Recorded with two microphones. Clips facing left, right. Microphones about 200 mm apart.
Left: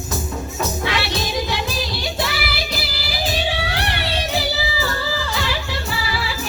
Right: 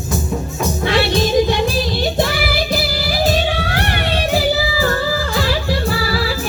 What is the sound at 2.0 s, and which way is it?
Music, 45° right (ahead or behind).